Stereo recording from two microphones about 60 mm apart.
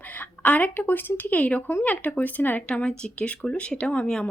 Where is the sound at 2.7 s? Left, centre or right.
Centre.